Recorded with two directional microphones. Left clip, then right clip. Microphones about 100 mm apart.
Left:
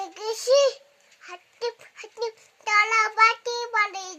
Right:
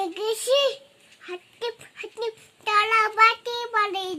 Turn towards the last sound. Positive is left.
turn(degrees=-20)  # may be behind; listen again after turning